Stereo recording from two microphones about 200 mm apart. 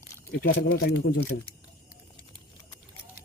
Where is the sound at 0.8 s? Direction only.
50° left (ahead or behind).